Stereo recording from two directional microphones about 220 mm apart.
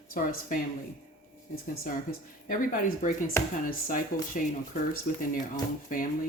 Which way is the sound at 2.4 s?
40° left (ahead or behind).